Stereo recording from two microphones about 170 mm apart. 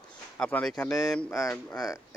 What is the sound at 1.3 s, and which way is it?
Speech, 15° left (ahead or behind).